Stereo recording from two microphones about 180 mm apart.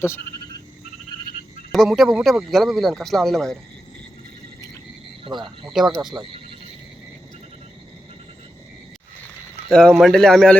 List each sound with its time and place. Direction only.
0.0 s frog: 15° left (ahead or behind)
1.7 s a man's voice: centre (ahead or behind)
5.4 s a man's voice: centre (ahead or behind)
9.6 s a man's voice: 5° left (ahead or behind)